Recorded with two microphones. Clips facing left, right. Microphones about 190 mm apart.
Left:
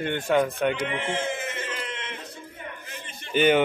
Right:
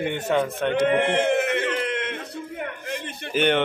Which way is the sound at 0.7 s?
60° right (ahead or behind).